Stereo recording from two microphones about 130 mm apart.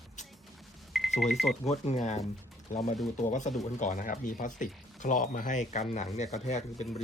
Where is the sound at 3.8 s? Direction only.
80° left.